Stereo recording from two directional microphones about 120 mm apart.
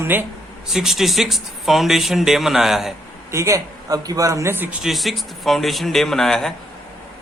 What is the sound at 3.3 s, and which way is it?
A man's voice, 25° right (ahead or behind).